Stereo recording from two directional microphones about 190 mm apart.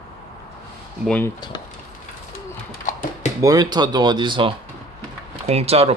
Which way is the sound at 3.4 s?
20° right (ahead or behind).